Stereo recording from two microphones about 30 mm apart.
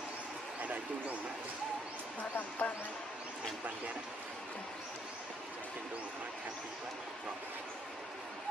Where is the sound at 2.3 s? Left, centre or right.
Left.